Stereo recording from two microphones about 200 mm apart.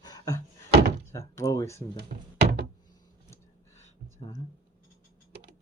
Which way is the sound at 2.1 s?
50° right (ahead or behind).